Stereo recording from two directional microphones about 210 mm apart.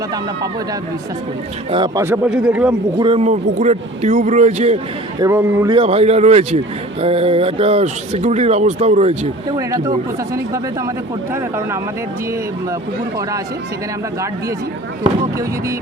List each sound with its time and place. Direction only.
1.7 s speech: 20° right (ahead or behind)
2.0 s speech: 5° right (ahead or behind)
3.0 s a man's voice: 30° right (ahead or behind)
5.2 s speech: 10° right (ahead or behind)
5.7 s speech: 30° right (ahead or behind)
9.5 s speech: 15° right (ahead or behind)